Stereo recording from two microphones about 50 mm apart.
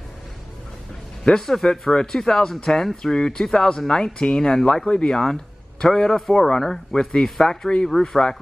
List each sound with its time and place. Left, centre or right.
1.4 s speech: centre
5.2 s a man's voice: centre